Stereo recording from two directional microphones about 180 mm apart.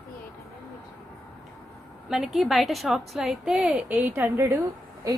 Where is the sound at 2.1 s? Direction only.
Centre (ahead or behind).